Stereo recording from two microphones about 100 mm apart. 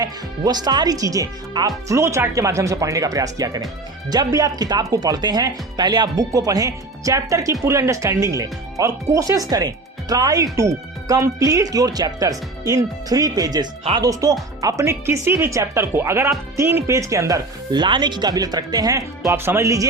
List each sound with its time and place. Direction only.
0.0 s speech: 40° right (ahead or behind)
17.7 s speech: 50° right (ahead or behind); by 19.9 s 30° right (ahead or behind)